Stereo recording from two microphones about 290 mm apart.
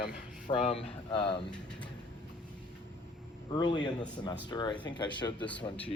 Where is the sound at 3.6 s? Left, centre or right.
Centre.